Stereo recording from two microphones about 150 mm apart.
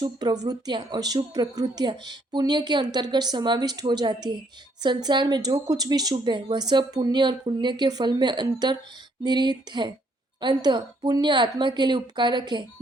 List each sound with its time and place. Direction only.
0.0 s a woman's voice: 25° right (ahead or behind)